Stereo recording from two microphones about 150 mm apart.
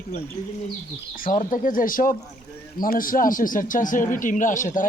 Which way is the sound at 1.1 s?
65° left (ahead or behind).